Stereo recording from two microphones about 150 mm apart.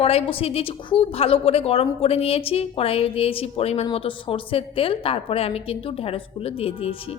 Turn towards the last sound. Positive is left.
turn(degrees=40)  # may be behind; listen again after turning